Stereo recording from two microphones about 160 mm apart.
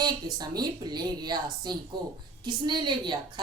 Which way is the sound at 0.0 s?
25° right (ahead or behind).